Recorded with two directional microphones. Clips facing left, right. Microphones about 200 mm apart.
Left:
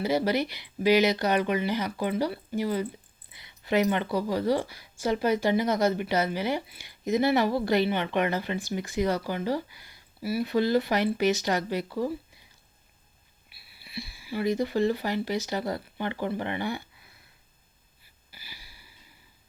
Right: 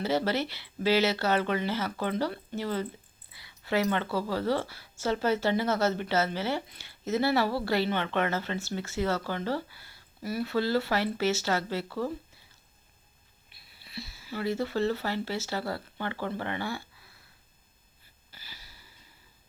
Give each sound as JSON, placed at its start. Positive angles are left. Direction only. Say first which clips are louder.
{"t": 0.0, "sound": "a woman's voice", "louder": "left 2 dB", "side_deg": 10}
{"t": 13.5, "sound": "speech", "louder": "left 3 dB", "side_deg": 10}
{"t": 18.3, "sound": "wheeze", "louder": "left 1 dB", "side_deg": 10}